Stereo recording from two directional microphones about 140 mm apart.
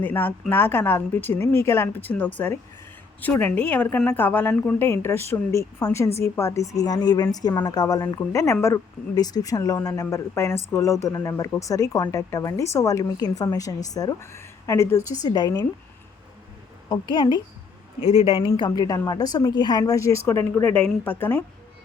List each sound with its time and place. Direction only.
0.0 s a woman's voice: 15° left (ahead or behind)
16.9 s a woman's voice: 35° left (ahead or behind); by 21.4 s 15° left (ahead or behind)